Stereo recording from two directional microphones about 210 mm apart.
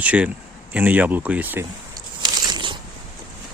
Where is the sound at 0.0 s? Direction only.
5° right (ahead or behind).